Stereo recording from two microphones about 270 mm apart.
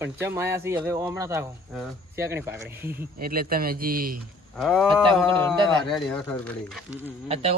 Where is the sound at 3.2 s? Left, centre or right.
Right.